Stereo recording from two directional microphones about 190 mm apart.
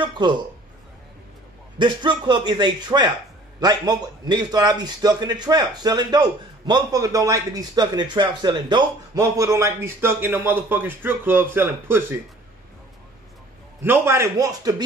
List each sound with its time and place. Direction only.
0.0 s a man's voice: 25° right (ahead or behind)
1.8 s a man's voice: 25° right (ahead or behind)
13.8 s a man's voice: 10° right (ahead or behind)